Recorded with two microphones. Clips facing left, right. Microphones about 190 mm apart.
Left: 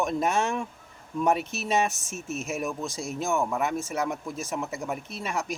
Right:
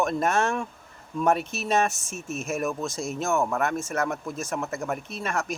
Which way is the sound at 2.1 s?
15° right (ahead or behind).